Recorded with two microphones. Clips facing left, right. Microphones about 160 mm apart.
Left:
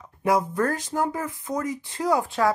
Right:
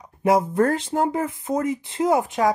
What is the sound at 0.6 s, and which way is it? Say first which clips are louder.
Speech: right 4 dB; 25° right (ahead or behind).